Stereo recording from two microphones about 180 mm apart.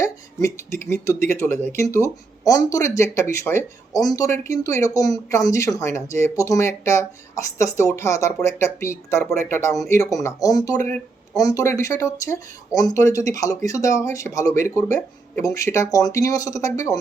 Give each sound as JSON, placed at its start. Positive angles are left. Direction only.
{"t": 0.0, "sound": "speech", "side_deg": 15}